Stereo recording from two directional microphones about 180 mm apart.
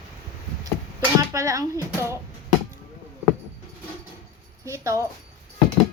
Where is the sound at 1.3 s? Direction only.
15° right (ahead or behind).